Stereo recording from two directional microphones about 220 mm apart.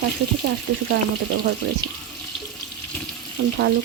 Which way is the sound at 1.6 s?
55° right (ahead or behind).